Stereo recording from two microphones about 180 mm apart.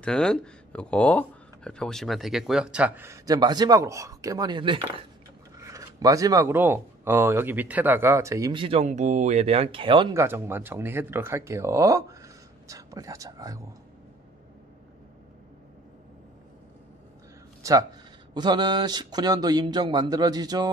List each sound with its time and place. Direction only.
0.0 s speech: 5° left (ahead or behind); by 5.0 s 30° right (ahead or behind)
5.6 s speech: 20° right (ahead or behind)
10.1 s speech: 15° right (ahead or behind)
18.3 s speech: 25° right (ahead or behind)